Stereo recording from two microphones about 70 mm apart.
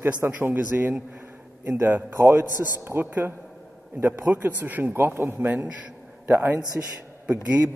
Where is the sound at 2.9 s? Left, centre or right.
Right.